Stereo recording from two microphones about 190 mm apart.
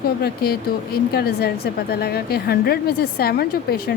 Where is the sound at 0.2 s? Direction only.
55° left (ahead or behind).